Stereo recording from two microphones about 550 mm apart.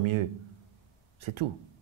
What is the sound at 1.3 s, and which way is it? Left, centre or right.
Speech, right.